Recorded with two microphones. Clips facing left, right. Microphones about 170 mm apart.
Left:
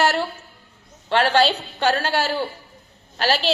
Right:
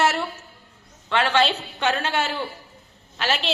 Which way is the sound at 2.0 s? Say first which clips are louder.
Left 3 dB; 35° left (ahead or behind).